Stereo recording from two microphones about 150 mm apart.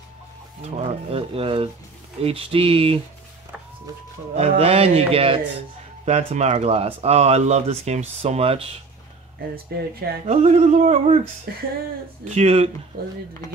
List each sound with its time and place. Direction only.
0.6 s speech: 40° right (ahead or behind)
4.4 s speech: 40° right (ahead or behind)
9.7 s speech: 90° right
10.2 s speech: 45° right (ahead or behind)
11.5 s speech: 90° right
12.4 s speech: 45° right (ahead or behind)